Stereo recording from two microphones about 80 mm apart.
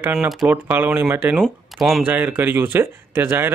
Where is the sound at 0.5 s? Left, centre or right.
Right.